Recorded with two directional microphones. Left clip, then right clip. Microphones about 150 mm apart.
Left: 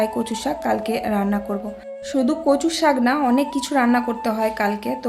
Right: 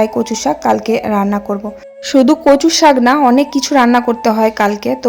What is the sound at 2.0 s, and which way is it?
A woman's voice, 55° right (ahead or behind).